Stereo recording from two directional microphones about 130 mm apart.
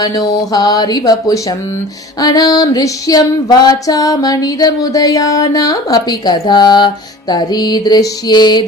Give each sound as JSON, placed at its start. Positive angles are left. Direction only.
{"t": 0.0, "sound": "music", "side_deg": 30}
{"t": 2.1, "sound": "female singing", "side_deg": 30}
{"t": 6.5, "sound": "music", "side_deg": 35}